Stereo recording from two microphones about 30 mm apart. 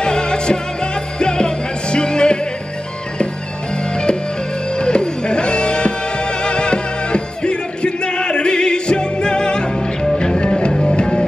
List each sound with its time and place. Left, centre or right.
0.0 s music: left
3.9 s music: left
10.7 s music: left
11.0 s music: left